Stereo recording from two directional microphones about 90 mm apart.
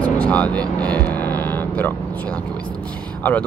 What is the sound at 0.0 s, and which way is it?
Vehicle, 15° left (ahead or behind).